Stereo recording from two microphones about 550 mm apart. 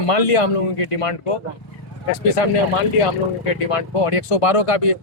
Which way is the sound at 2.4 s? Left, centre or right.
Left.